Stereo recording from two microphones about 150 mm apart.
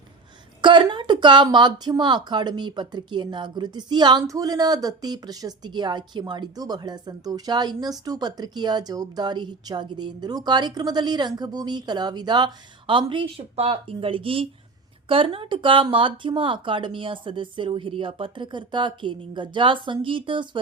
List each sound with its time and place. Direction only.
0.6 s a woman's voice: 30° right (ahead or behind)